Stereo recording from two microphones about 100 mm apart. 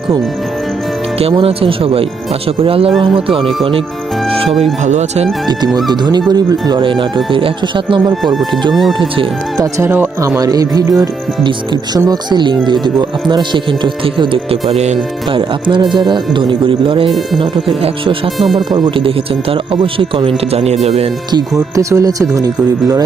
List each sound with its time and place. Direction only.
1.3 s speech: 60° right (ahead or behind)
4.4 s speech: centre (ahead or behind)
5.5 s speech: 45° right (ahead or behind)
6.8 s speech: 60° right (ahead or behind)
8.1 s speech: centre (ahead or behind)
9.6 s speech: 35° right (ahead or behind); by 14.8 s 75° right (ahead or behind)
15.3 s speech: 60° right (ahead or behind)
18.3 s speech: centre (ahead or behind)
18.9 s speech: 65° right (ahead or behind); by 21.1 s 90° right
21.3 s speech: 35° right (ahead or behind)